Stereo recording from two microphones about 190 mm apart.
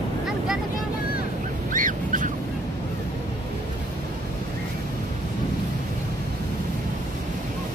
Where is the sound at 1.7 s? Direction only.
45° right (ahead or behind).